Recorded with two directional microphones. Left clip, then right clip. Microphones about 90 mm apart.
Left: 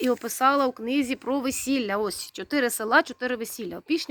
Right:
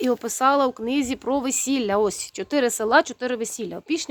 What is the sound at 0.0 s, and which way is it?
Speech, 25° right (ahead or behind).